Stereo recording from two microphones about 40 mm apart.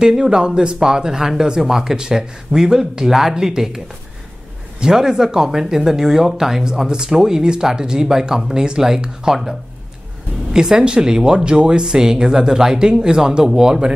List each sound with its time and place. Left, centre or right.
0.0 s speech: centre